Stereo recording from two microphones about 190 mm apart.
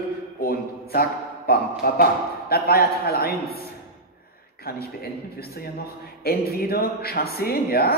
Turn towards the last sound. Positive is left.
turn(degrees=55)  # may be behind; listen again after turning